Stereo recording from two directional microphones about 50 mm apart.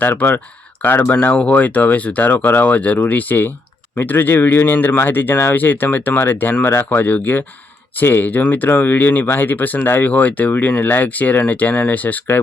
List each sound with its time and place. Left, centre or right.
0.0 s speech: left
1.3 s speech: left